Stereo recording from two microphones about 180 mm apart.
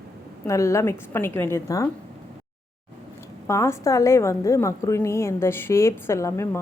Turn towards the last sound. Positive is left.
turn(degrees=15)  # may be behind; listen again after turning